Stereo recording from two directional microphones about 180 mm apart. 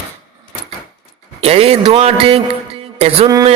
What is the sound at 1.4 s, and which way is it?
A man's voice, 35° right (ahead or behind).